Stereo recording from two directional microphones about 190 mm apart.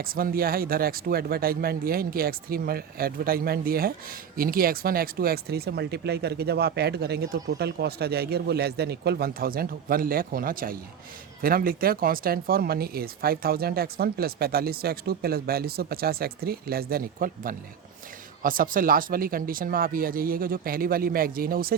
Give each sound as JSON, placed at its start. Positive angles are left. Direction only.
{"t": 0.0, "sound": "speech", "side_deg": -50}